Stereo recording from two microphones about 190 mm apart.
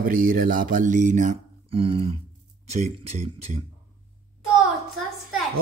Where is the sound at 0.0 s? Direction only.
45° right (ahead or behind).